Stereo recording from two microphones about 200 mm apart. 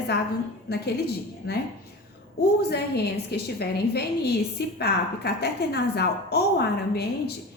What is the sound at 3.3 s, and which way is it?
A woman's voice, 55° left (ahead or behind).